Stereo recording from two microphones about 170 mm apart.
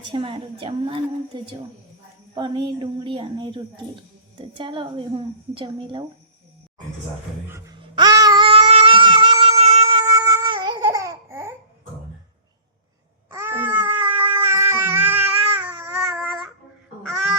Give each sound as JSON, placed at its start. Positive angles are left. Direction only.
{"t": 0.1, "sound": "a woman's voice", "side_deg": -30}
{"t": 7.8, "sound": "babbling", "side_deg": -25}
{"t": 10.1, "sound": "babbling", "side_deg": -20}
{"t": 13.3, "sound": "a sound", "side_deg": -15}
{"t": 16.2, "sound": "child singing", "side_deg": 0}
{"t": 17.0, "sound": "fowl", "side_deg": 5}